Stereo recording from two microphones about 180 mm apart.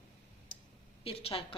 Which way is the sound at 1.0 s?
30° left (ahead or behind).